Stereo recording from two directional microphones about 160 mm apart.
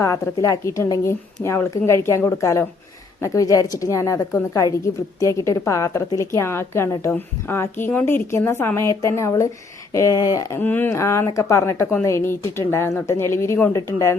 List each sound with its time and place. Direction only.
0.0 s a woman's voice: 20° left (ahead or behind)